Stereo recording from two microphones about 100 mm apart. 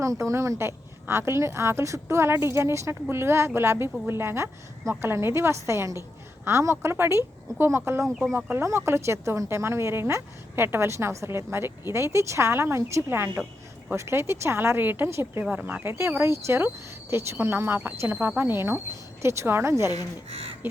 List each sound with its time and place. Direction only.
0.0 s speech: 30° right (ahead or behind)
15.4 s speech: 10° right (ahead or behind)
20.3 s speech: 80° right